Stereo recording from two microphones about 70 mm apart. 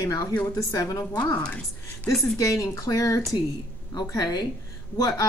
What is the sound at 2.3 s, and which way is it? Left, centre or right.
Speech, left.